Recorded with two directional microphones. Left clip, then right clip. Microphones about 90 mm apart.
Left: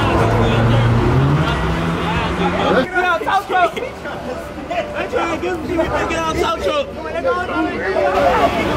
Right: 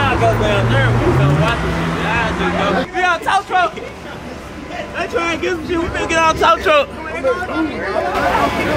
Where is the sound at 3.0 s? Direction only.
20° right (ahead or behind).